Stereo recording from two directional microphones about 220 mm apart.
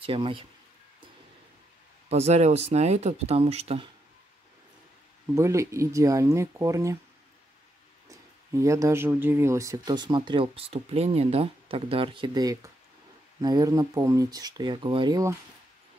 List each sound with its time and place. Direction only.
0.0 s speech: 25° right (ahead or behind)
2.0 s speech: 30° right (ahead or behind)
5.3 s speech: 15° right (ahead or behind)
8.5 s speech: 15° right (ahead or behind)